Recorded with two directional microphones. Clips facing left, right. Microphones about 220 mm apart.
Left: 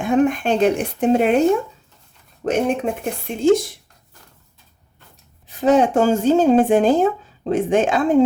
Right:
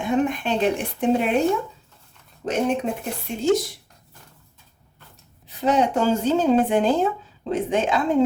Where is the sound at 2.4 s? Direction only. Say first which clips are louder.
Left 3 dB; 60° left (ahead or behind).